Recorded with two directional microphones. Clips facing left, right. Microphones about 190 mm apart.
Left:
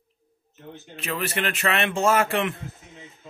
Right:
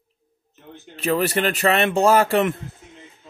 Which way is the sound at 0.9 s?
35° right (ahead or behind).